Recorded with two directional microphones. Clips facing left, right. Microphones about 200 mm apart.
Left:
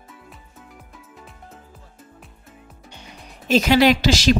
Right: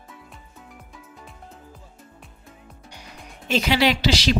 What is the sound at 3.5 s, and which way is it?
Speech, 45° left (ahead or behind).